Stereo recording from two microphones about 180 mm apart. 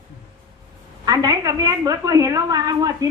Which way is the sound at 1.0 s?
20° right (ahead or behind).